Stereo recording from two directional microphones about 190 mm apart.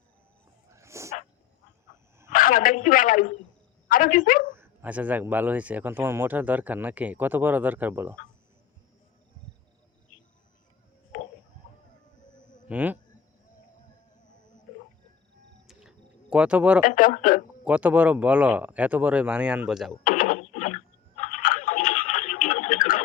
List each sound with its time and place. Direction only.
0.7 s dog: 15° right (ahead or behind)
2.3 s a woman's voice: 45° left (ahead or behind)
4.5 s speech: 10° right (ahead or behind)
12.6 s speech: 10° right (ahead or behind)
15.6 s a sound: 5° right (ahead or behind)
16.8 s speech: 45° left (ahead or behind)
17.7 s speech: 5° right (ahead or behind)
20.1 s a sound: 45° left (ahead or behind)